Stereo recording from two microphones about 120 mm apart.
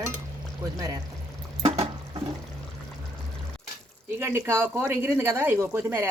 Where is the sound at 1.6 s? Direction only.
50° right (ahead or behind).